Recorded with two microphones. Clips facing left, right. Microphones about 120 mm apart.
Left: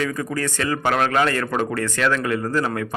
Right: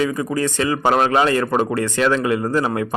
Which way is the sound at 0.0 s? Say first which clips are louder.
Right 4 dB; 20° right (ahead or behind).